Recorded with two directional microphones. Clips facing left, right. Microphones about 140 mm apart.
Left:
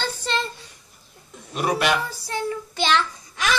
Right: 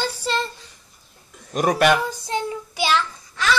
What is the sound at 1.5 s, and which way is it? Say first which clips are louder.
Speech: right 4 dB; 45° right (ahead or behind).